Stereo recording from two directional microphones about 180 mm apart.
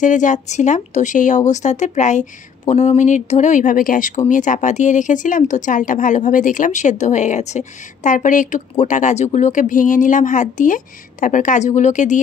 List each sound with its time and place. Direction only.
0.0 s speech: 45° left (ahead or behind)